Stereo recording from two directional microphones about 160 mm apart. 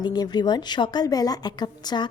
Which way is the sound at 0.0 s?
25° left (ahead or behind).